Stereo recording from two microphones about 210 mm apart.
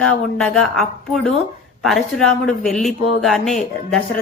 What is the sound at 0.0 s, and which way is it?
A woman's voice, 5° left (ahead or behind).